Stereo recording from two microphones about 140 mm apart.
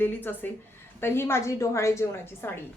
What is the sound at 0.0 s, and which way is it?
A woman's voice, 15° left (ahead or behind).